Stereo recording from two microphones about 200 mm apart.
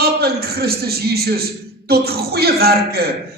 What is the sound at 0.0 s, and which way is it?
A man's voice, 50° right (ahead or behind).